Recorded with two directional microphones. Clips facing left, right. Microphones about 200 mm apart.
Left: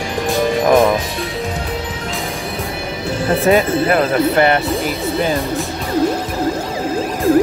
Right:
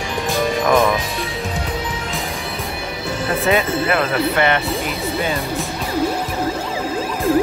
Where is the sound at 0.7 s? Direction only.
25° left (ahead or behind).